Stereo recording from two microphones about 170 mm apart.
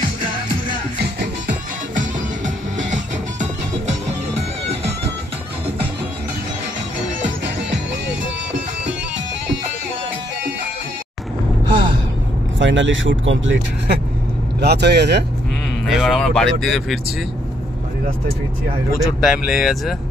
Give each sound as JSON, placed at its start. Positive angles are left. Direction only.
{"t": 2.0, "sound": "music", "side_deg": -45}
{"t": 12.5, "sound": "speech", "side_deg": -90}
{"t": 14.6, "sound": "speech", "side_deg": -75}
{"t": 15.9, "sound": "speech", "side_deg": 0}
{"t": 19.2, "sound": "speech", "side_deg": 0}